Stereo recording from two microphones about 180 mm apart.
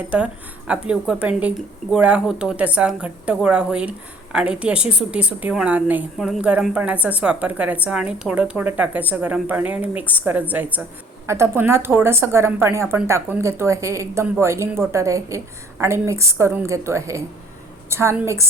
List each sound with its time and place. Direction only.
0.7 s speech: 5° right (ahead or behind)